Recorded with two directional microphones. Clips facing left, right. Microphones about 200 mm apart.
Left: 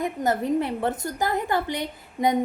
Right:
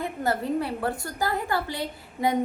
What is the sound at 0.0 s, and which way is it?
A woman's voice, 15° left (ahead or behind).